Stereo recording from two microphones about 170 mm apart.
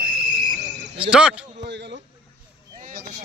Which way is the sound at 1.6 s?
85° right.